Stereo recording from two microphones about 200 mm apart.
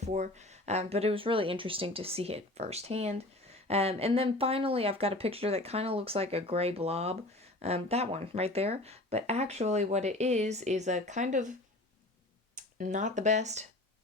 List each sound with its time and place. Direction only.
0.0 s speech: 35° right (ahead or behind)
12.5 s speech: 40° right (ahead or behind)